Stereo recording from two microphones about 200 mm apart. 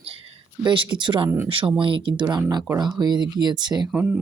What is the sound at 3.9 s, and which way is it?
Speech, 5° right (ahead or behind).